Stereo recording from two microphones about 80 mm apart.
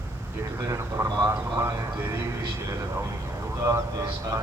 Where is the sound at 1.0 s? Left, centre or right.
Right.